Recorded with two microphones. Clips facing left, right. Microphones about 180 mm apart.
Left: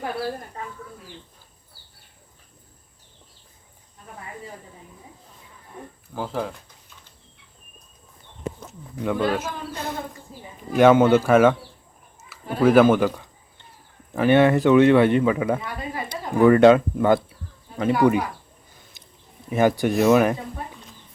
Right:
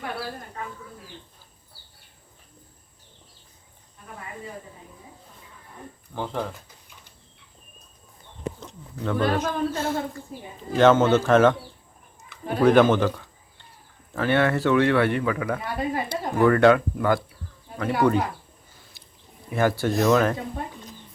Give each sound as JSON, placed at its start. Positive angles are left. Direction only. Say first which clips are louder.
{"t": 6.1, "sound": "speech", "louder": "left 2 dB", "side_deg": 5}
{"t": 8.6, "sound": "speech", "louder": "left 5 dB", "side_deg": 10}
{"t": 12.3, "sound": "a sound", "louder": "left 1 dB", "side_deg": 5}
{"t": 14.1, "sound": "speech", "louder": "left 5 dB", "side_deg": 15}
{"t": 19.0, "sound": "a sound", "louder": "left 2 dB", "side_deg": 20}
{"t": 19.5, "sound": "speech", "louder": "left 3 dB", "side_deg": 15}